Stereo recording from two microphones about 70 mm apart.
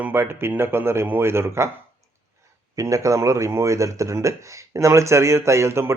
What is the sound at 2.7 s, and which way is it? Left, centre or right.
Speech, right.